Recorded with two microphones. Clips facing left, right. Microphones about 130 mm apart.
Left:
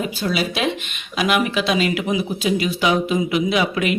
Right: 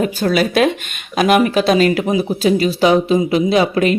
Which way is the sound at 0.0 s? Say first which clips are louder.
Right 7 dB; 50° right (ahead or behind).